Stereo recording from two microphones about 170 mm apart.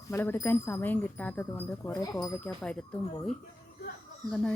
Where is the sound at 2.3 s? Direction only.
10° left (ahead or behind).